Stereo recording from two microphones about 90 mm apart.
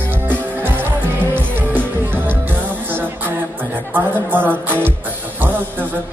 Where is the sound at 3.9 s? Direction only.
20° right (ahead or behind).